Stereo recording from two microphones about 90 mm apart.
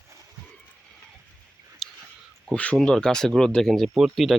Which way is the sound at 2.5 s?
15° left (ahead or behind).